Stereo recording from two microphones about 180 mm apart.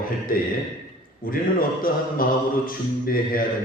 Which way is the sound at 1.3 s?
50° left (ahead or behind).